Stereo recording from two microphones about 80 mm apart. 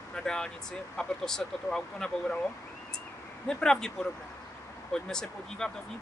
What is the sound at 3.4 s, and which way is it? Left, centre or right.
Speech, centre.